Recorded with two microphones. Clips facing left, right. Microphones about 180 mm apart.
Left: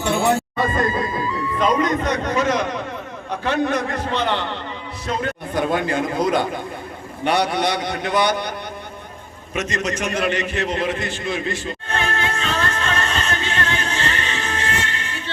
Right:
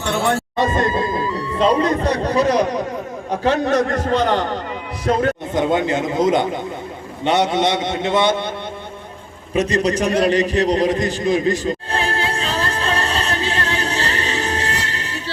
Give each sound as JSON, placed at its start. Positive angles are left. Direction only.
{"t": 0.0, "sound": "speech", "side_deg": 10}
{"t": 1.5, "sound": "a man's voice", "side_deg": -30}
{"t": 5.5, "sound": "a man's voice", "side_deg": -20}
{"t": 9.6, "sound": "a sound", "side_deg": -35}